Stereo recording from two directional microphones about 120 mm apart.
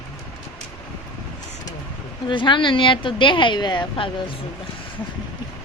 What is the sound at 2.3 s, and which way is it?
Speech, 40° left (ahead or behind).